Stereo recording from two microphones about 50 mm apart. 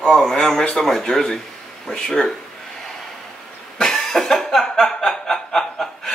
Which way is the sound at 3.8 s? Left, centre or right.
Centre.